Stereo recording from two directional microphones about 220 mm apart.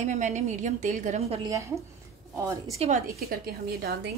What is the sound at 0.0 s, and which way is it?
A woman's voice, 35° right (ahead or behind).